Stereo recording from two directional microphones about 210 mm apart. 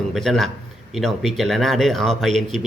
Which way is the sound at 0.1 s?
Centre (ahead or behind).